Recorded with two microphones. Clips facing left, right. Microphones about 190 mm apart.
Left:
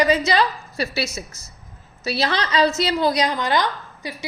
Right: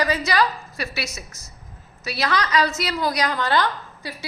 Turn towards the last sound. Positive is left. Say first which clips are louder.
# left 2 dB
turn(degrees=15)  # may be behind; listen again after turning